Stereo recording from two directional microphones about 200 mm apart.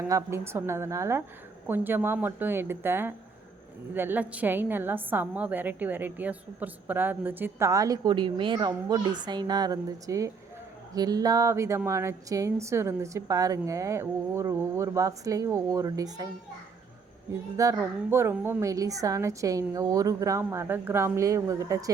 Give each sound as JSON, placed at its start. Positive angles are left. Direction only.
{"t": 0.0, "sound": "a woman's voice", "side_deg": -15}
{"t": 17.6, "sound": "a woman's voice", "side_deg": -15}